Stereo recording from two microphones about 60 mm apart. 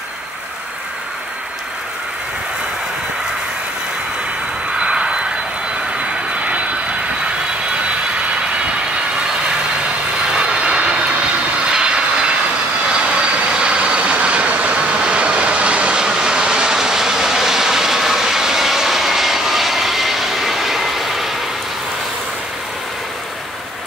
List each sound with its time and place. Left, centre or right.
4.7 s vehicle: centre
10.3 s vehicle: centre